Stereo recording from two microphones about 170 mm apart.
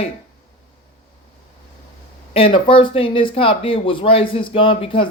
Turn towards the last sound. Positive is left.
turn(degrees=30)  # may be behind; listen again after turning